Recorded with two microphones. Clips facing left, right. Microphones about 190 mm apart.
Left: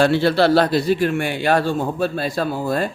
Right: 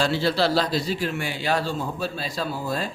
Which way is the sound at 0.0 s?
60° left (ahead or behind).